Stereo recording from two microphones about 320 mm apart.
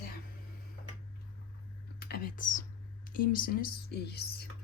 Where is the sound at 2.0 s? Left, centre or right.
Left.